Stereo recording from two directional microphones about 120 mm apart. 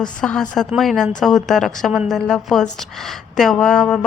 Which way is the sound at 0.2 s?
5° left (ahead or behind).